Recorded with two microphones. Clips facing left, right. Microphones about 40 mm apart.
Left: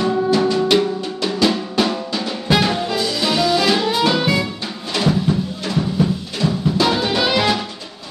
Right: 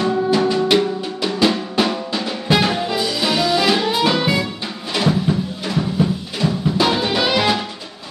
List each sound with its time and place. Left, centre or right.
0.3 s music: centre
0.6 s drum: centre
4.9 s music: centre